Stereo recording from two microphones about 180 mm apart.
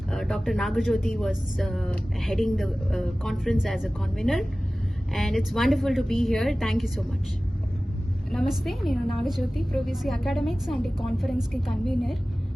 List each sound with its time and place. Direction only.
0.1 s speech: centre (ahead or behind)
8.3 s speech: centre (ahead or behind)